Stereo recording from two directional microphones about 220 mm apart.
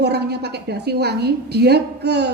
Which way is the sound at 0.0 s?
50° right (ahead or behind).